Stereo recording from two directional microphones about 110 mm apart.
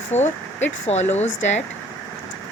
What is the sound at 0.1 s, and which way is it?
Speech, 90° left.